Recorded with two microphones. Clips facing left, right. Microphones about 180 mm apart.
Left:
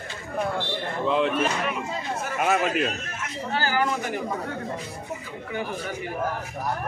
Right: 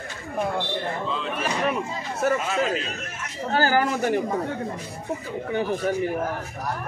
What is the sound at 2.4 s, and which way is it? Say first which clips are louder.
Speech: left 2 dB; 65° left (ahead or behind).